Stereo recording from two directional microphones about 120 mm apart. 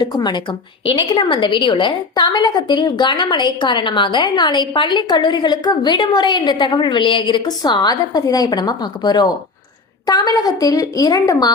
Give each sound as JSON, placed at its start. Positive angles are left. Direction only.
{"t": 0.0, "sound": "a woman's voice", "side_deg": 35}